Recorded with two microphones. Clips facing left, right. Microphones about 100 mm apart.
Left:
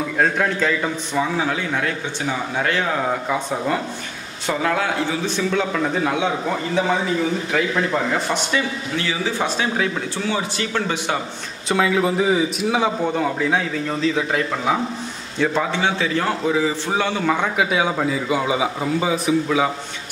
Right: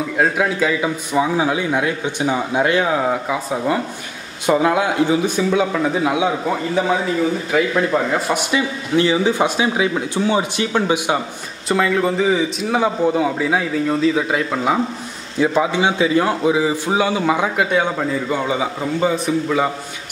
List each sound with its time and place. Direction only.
0.2 s a man's voice: 5° right (ahead or behind)
4.5 s a man's voice: 15° right (ahead or behind)
8.9 s a man's voice: 25° right (ahead or behind)
11.7 s a man's voice: 5° left (ahead or behind)
17.6 s a man's voice: 5° left (ahead or behind)